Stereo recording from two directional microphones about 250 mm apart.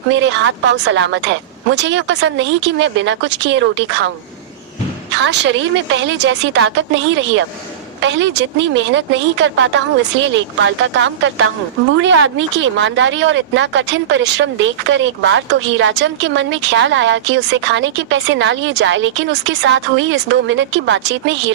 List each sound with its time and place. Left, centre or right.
0.1 s speech: right
5.1 s speech: right